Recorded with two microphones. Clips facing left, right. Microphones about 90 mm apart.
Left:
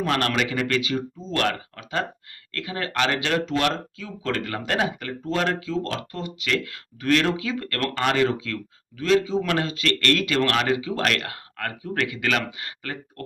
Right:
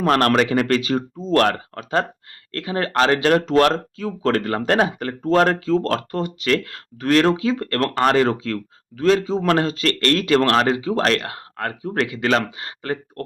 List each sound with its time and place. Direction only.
0.0 s speech: 45° right (ahead or behind)